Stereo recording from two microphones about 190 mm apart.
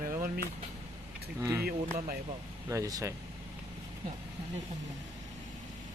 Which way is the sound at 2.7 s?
15° right (ahead or behind).